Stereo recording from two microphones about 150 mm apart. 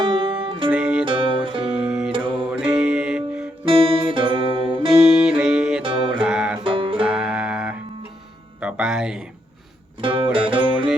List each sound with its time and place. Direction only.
0.0 s music: 35° right (ahead or behind)
0.7 s music: 5° right (ahead or behind)
1.0 s music: 35° right (ahead or behind)
1.8 s music: 5° right (ahead or behind)
2.1 s music: 35° right (ahead or behind)
2.5 s music: 5° right (ahead or behind)
3.7 s music: 35° right (ahead or behind)
5.0 s music: 5° right (ahead or behind)
6.7 s music: 35° right (ahead or behind)
7.0 s music: 5° right (ahead or behind)
8.6 s speech: 5° right (ahead or behind)
10.0 s music: 35° right (ahead or behind)